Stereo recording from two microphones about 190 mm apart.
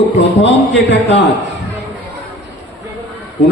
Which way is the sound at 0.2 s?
70° left (ahead or behind).